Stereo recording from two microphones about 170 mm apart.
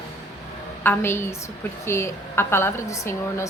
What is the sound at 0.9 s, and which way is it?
A woman's voice, 15° left (ahead or behind).